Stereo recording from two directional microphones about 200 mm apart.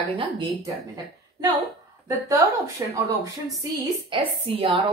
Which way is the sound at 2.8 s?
15° right (ahead or behind).